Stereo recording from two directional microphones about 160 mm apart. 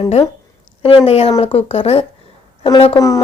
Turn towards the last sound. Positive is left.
turn(degrees=25)  # may be behind; listen again after turning